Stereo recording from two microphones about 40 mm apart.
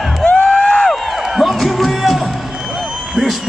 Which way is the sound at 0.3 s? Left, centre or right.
Left.